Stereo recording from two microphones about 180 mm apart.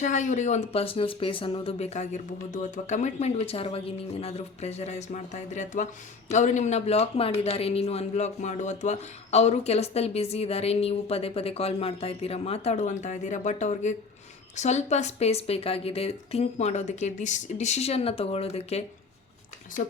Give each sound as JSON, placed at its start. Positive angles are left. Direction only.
{"t": 0.0, "sound": "speech", "side_deg": 40}